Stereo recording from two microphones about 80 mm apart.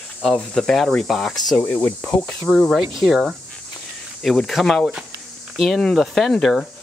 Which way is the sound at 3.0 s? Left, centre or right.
Centre.